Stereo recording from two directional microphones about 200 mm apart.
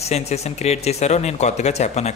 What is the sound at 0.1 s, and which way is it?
Speech, 35° left (ahead or behind).